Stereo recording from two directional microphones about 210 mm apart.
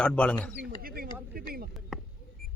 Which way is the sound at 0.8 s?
45° right (ahead or behind).